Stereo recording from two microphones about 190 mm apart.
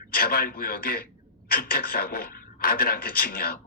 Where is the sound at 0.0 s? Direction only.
50° left (ahead or behind).